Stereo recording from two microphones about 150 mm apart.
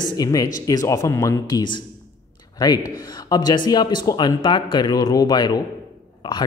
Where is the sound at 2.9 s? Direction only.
25° left (ahead or behind).